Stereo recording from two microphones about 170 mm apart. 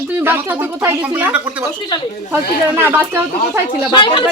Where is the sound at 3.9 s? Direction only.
30° left (ahead or behind).